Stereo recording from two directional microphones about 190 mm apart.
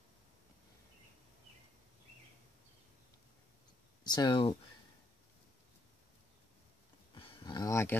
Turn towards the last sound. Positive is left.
turn(degrees=15)  # may be behind; listen again after turning